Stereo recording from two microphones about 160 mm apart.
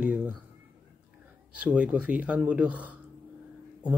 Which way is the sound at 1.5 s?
10° right (ahead or behind).